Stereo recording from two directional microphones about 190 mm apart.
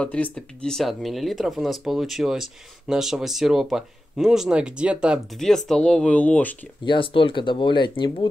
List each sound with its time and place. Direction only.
0.0 s speech: 5° left (ahead or behind)
6.8 s speech: 25° left (ahead or behind)